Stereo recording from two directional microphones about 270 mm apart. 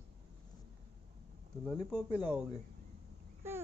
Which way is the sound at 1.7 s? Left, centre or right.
Centre.